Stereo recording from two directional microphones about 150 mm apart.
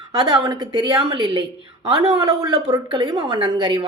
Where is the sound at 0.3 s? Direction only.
25° right (ahead or behind).